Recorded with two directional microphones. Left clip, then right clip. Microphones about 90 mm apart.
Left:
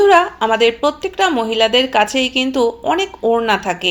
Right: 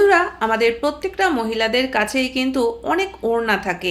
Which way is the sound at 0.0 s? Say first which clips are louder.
Left 4 dB; 20° left (ahead or behind).